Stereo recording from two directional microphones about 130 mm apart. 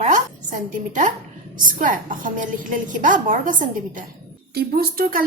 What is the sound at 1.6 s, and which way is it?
A woman's voice, 90° right.